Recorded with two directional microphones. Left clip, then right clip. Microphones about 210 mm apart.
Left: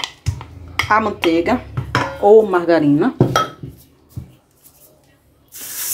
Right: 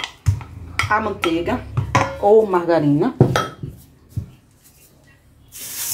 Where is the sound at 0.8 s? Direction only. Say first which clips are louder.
Left 5 dB; 25° left (ahead or behind).